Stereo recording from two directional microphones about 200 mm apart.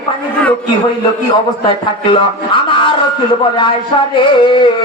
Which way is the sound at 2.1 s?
25° left (ahead or behind).